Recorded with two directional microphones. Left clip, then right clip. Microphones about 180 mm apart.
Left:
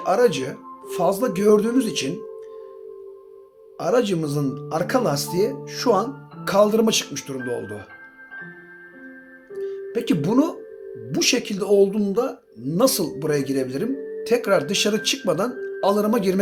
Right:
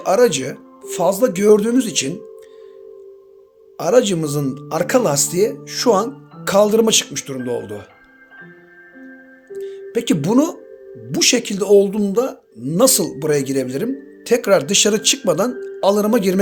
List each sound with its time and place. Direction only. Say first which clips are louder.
0.0 s speech: right 4 dB; 40° right (ahead or behind)
3.8 s speech: right 6 dB; 40° right (ahead or behind)
9.6 s speech: right 3 dB; 45° right (ahead or behind)